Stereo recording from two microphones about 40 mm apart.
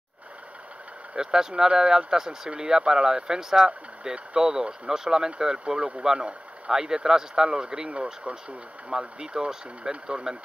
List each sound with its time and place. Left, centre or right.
1.1 s speech: centre
7.4 s speech: right
8.2 s speech: centre
8.9 s speech: right